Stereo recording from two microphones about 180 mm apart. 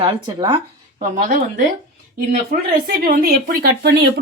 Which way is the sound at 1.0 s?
45° right (ahead or behind).